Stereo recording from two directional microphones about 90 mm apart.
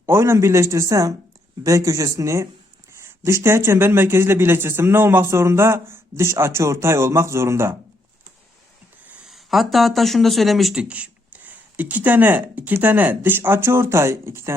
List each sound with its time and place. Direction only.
0.0 s speech: 30° right (ahead or behind)
9.1 s speech: 5° right (ahead or behind)
10.8 s speech: 15° right (ahead or behind); by 14.5 s 30° right (ahead or behind)